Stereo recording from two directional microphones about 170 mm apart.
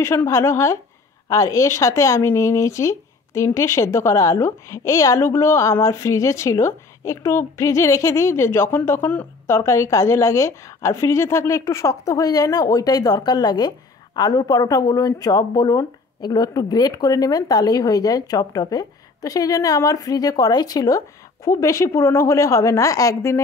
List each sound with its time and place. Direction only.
0.0 s a woman's voice: 15° left (ahead or behind)